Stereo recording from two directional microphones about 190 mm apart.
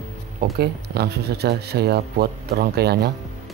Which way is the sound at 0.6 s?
60° right (ahead or behind).